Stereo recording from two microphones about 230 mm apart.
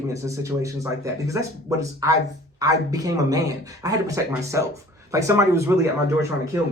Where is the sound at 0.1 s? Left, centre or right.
Centre.